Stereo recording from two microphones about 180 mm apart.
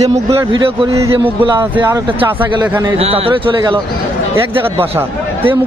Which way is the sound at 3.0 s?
35° right (ahead or behind).